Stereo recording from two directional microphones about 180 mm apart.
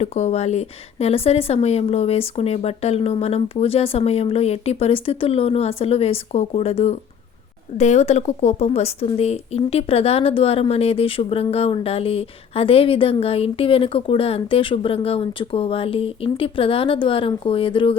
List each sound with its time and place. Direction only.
0.0 s a woman's voice: 35° left (ahead or behind)